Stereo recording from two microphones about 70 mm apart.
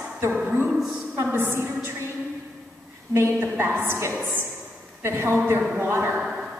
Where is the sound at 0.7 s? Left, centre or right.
Centre.